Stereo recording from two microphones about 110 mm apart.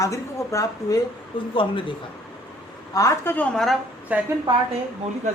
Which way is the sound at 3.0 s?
30° left (ahead or behind).